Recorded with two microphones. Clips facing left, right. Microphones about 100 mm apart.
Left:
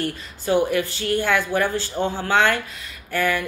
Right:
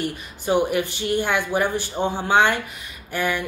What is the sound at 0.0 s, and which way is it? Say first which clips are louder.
Speech: even; 15° right (ahead or behind).